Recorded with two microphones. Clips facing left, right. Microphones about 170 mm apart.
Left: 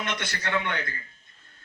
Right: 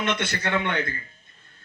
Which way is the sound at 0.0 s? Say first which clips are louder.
Right 5 dB; 25° right (ahead or behind).